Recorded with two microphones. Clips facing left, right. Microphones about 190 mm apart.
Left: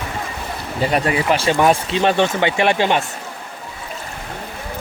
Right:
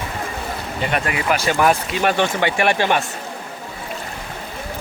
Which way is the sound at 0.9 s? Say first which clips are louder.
Left 3 dB; 35° left (ahead or behind).